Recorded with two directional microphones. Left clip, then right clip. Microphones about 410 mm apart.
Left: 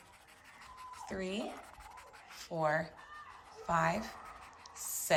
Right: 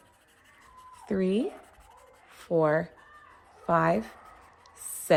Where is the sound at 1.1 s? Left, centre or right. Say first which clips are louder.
Right 12 dB; centre.